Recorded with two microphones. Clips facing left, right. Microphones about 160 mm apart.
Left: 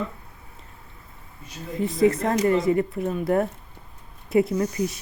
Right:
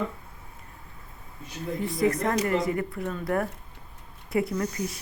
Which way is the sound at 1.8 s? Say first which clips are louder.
Left 5 dB; 25° left (ahead or behind).